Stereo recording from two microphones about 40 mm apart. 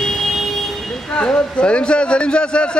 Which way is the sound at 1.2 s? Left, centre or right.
Left.